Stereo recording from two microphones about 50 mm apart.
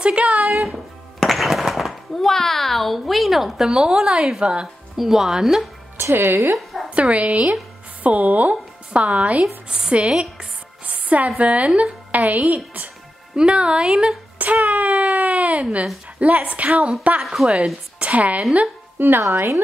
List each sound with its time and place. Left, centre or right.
0.0 s a woman's voice: right
1.2 s a child's voice: centre
4.9 s speech: centre
6.1 s speech: right
6.9 s a woman's voice: right
9.7 s a woman's voice: centre
14.4 s a sound: right
16.2 s a woman's voice: right
18.9 s speech: right